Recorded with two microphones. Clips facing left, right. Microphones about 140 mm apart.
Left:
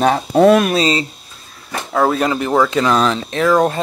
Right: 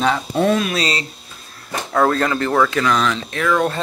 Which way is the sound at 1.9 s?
10° left (ahead or behind).